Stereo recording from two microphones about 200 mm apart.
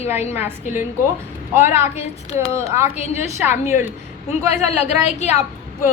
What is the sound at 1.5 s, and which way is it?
Speech, 10° right (ahead or behind).